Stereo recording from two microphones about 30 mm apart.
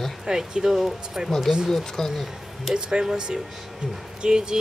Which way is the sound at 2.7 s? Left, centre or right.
Right.